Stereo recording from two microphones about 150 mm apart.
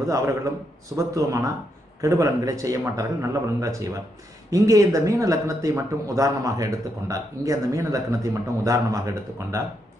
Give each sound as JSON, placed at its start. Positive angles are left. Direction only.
{"t": 0.9, "sound": "speech", "side_deg": -20}